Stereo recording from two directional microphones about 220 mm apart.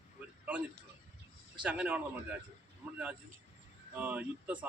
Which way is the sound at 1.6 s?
5° right (ahead or behind).